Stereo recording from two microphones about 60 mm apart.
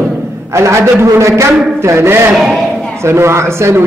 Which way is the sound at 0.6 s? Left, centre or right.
Right.